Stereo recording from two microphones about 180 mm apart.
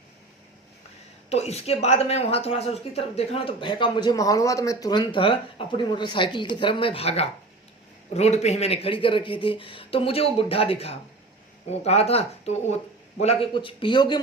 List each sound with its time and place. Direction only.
1.3 s speech: 35° left (ahead or behind)